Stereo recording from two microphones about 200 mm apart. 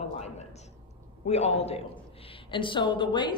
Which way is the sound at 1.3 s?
30° left (ahead or behind).